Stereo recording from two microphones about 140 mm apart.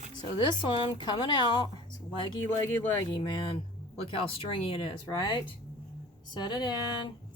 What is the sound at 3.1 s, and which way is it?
Speech, 35° left (ahead or behind).